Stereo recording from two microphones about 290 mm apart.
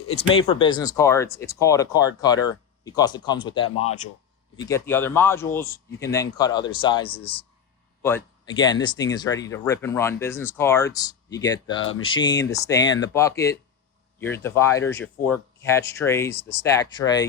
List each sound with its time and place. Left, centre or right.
0.1 s speech: centre
11.8 s speech: left
12.1 s speech: centre